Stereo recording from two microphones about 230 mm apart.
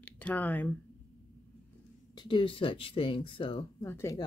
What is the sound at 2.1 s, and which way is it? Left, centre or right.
Speech, left.